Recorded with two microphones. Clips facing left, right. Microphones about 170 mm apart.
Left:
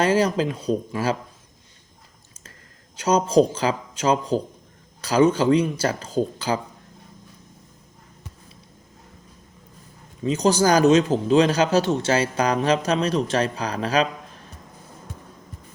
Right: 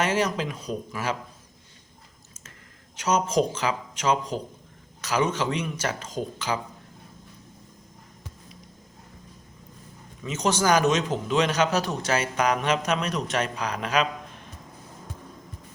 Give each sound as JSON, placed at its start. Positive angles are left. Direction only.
{"t": 0.0, "sound": "a man's voice", "side_deg": 30}
{"t": 2.9, "sound": "a man's voice", "side_deg": 30}
{"t": 10.2, "sound": "a man's voice", "side_deg": 35}